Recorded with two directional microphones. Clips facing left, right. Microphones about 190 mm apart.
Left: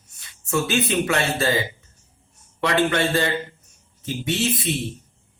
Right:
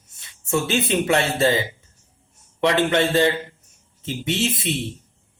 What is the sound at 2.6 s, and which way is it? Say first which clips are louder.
Speech: right 2 dB; 25° right (ahead or behind).